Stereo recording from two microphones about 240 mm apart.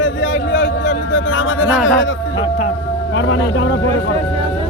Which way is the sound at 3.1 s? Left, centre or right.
Left.